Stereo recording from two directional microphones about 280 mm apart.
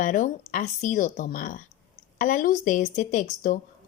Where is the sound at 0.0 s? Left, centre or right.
Left.